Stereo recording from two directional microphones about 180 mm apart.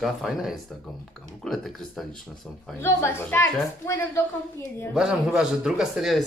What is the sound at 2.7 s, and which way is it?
A woman's voice, 15° left (ahead or behind).